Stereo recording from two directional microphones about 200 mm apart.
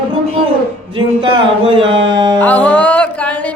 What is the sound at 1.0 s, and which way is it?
Speech, 25° right (ahead or behind).